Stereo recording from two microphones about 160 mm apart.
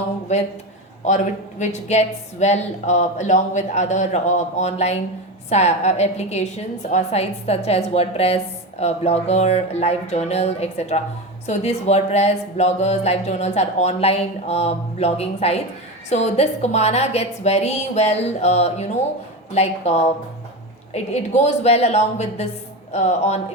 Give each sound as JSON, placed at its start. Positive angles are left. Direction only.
{"t": 0.3, "sound": "speech", "side_deg": 45}